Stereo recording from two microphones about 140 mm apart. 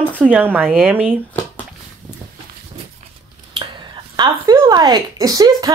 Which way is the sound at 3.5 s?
35° right (ahead or behind).